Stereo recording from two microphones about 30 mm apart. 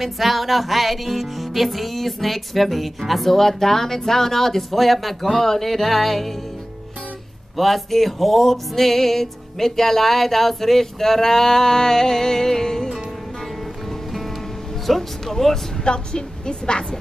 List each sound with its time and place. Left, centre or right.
0.0 s speech: centre
7.5 s music: centre
13.8 s music: centre
15.8 s a woman's voice: left